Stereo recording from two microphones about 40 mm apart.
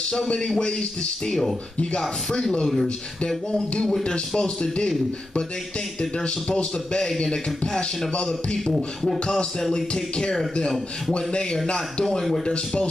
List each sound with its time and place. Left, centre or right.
0.6 s a man's voice: left
2.6 s beatboxing: centre
4.4 s a man's voice: left
8.7 s beatboxing: centre
9.2 s a man's voice: left
9.6 s a man's voice: centre
11.6 s a man's voice: centre